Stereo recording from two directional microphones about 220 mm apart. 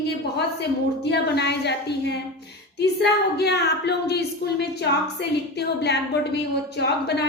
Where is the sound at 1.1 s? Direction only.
50° left (ahead or behind).